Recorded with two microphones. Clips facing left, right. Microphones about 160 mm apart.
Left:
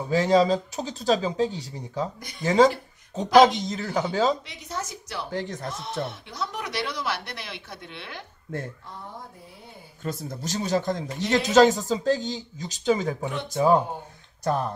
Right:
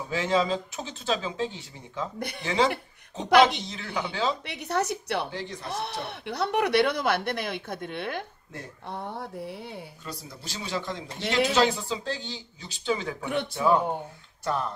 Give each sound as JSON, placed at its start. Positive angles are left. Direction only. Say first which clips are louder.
{"t": 0.1, "sound": "a man's voice", "louder": "left 6 dB", "side_deg": 40}
{"t": 4.5, "sound": "speech", "louder": "right 7 dB", "side_deg": -65}
{"t": 5.3, "sound": "a man's voice", "louder": "left 5 dB", "side_deg": 45}
{"t": 5.7, "sound": "speech", "louder": "left 1 dB", "side_deg": -65}
{"t": 8.8, "sound": "speech", "louder": "right 5 dB", "side_deg": -65}
{"t": 10.0, "sound": "a man's voice", "louder": "left 8 dB", "side_deg": 50}